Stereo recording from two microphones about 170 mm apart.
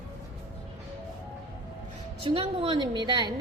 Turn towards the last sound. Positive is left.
turn(degrees=-25)  # may be behind; listen again after turning